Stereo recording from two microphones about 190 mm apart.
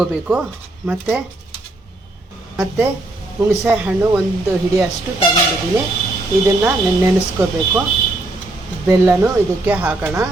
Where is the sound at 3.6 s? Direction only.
10° right (ahead or behind).